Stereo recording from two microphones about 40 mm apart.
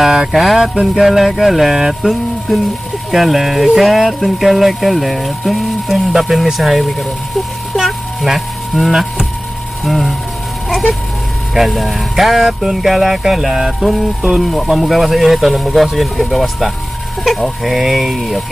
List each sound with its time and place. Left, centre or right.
0.0 s speech: centre
0.3 s speech: centre
7.7 s music: centre
9.8 s speech: centre
11.5 s speech: centre